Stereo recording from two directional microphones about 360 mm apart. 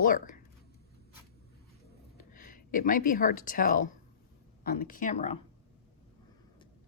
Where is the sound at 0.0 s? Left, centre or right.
Left.